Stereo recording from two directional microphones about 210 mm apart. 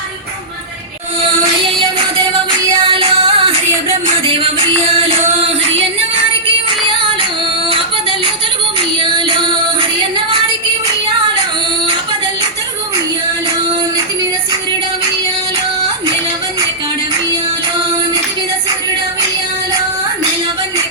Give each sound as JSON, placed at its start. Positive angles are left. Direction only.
{"t": 2.8, "sound": "music", "side_deg": -25}
{"t": 9.0, "sound": "music", "side_deg": -20}